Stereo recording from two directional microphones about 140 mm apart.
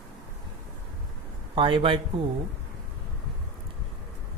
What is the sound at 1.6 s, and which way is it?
Speech, 40° right (ahead or behind).